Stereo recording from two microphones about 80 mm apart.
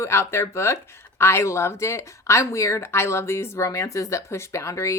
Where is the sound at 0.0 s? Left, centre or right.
Left.